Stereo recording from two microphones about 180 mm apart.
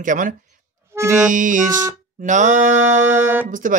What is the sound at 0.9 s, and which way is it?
Music, 15° right (ahead or behind).